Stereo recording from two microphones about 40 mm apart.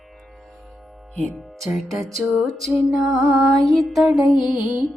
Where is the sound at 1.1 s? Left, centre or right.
Centre.